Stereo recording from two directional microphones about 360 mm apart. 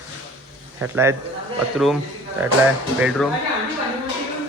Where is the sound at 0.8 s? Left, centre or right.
Centre.